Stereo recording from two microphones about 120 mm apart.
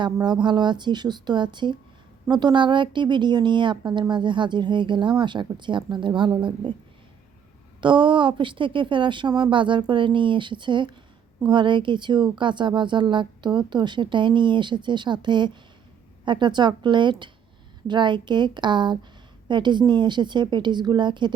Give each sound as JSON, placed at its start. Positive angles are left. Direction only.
{"t": 0.0, "sound": "speech", "side_deg": -40}
{"t": 7.8, "sound": "speech", "side_deg": -40}